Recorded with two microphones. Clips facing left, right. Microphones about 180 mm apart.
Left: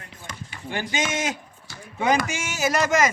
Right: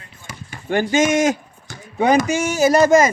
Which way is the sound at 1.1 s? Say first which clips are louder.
Right 11 dB; 45° right (ahead or behind).